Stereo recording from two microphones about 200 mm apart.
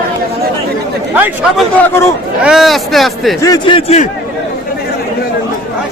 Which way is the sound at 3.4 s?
20° left (ahead or behind).